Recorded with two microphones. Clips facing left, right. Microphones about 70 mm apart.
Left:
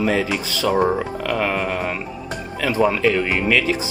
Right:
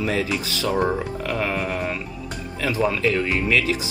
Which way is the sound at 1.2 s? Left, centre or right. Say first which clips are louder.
Left 4 dB; left.